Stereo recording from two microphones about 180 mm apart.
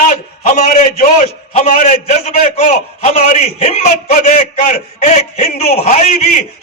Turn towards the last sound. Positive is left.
turn(degrees=40)  # may be behind; listen again after turning